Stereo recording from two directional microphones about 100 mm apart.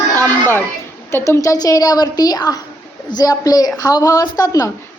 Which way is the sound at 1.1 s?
30° left (ahead or behind).